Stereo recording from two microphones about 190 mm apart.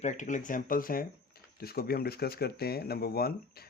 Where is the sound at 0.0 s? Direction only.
40° left (ahead or behind).